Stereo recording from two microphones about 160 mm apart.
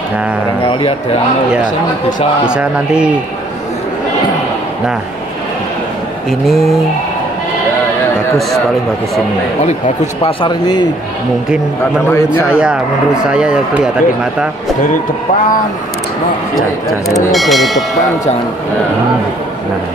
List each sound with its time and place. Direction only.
2.4 s speech: 5° right (ahead or behind)
6.4 s speech: centre (ahead or behind)
10.2 s speech: 30° left (ahead or behind)
12.4 s speech: 5° right (ahead or behind)
17.3 s speech: centre (ahead or behind)